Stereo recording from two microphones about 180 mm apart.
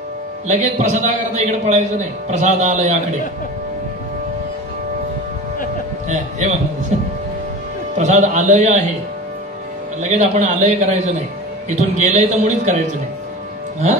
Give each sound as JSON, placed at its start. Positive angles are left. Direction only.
{"t": 0.5, "sound": "a man's voice", "side_deg": -40}
{"t": 6.0, "sound": "a man's voice", "side_deg": -40}
{"t": 10.0, "sound": "a man's voice", "side_deg": -40}